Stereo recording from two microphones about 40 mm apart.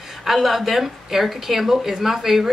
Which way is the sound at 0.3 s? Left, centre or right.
Centre.